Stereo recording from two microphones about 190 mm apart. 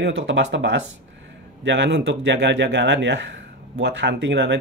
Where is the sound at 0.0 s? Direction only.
80° right.